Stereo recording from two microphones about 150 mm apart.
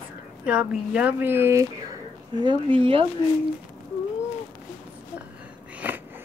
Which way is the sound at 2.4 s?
35° right (ahead or behind).